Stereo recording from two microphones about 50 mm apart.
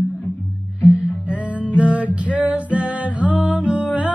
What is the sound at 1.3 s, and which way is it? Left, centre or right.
Music, right.